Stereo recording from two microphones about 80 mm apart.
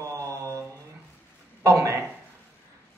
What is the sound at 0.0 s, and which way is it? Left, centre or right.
Mantra, right.